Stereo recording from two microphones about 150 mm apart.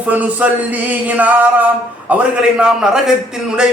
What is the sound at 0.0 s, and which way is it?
A man's voice, 10° right (ahead or behind).